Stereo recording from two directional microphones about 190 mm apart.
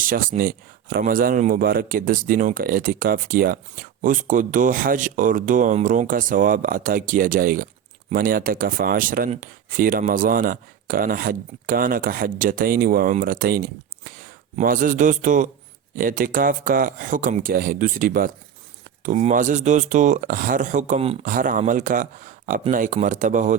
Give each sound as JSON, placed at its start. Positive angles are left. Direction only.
{"t": 0.0, "sound": "speech", "side_deg": -45}